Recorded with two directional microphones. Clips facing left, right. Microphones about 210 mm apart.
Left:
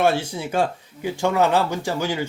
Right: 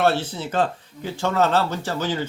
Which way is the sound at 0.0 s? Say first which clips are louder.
Left 1 dB; 10° left (ahead or behind).